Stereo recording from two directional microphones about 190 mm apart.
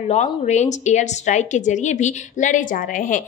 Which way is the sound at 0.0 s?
35° left (ahead or behind).